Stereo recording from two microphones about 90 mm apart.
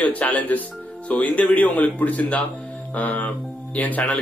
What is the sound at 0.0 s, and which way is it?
Speech, 15° left (ahead or behind).